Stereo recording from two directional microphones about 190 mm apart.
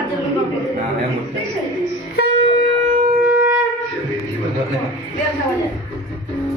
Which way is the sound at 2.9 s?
40° right (ahead or behind).